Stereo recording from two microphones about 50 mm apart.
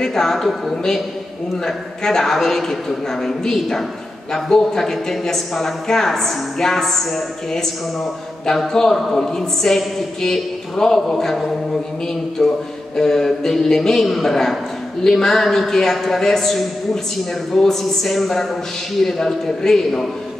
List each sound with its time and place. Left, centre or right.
0.0 s a woman's voice: centre